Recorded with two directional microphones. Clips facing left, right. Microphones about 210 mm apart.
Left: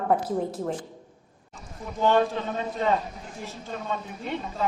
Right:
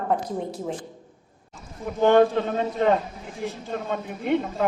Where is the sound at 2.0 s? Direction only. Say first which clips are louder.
Right 5 dB; 55° right (ahead or behind).